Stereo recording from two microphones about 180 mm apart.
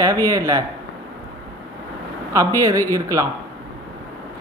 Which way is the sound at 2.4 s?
20° right (ahead or behind).